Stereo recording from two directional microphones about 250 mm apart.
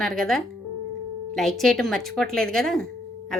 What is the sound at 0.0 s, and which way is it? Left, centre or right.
Speech, centre.